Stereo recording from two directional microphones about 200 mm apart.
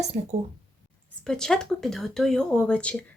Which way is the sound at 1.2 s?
Centre (ahead or behind).